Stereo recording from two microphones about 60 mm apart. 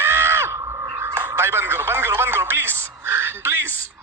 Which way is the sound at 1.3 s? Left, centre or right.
Right.